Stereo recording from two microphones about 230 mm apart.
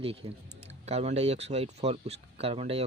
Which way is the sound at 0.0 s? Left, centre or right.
Right.